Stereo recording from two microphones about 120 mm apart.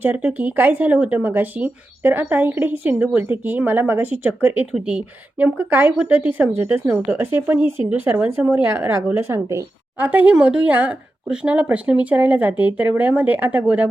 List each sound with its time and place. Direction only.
0.0 s speech: 15° right (ahead or behind)